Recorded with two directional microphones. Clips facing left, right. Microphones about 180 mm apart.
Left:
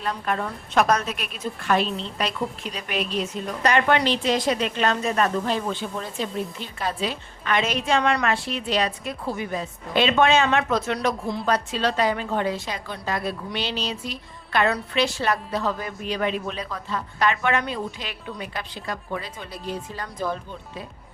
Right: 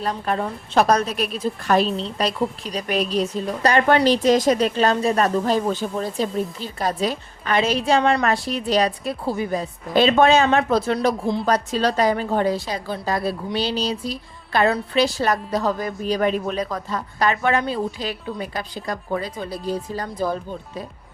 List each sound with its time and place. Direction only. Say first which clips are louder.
0.0 s a woman's voice: right 3 dB; 35° right (ahead or behind)